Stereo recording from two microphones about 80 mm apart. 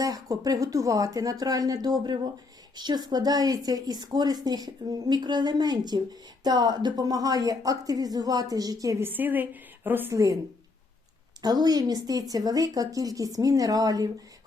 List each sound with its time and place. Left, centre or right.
0.0 s a woman's voice: right
9.0 s a woman's voice: right
10.1 s speech: right
11.4 s a woman's voice: right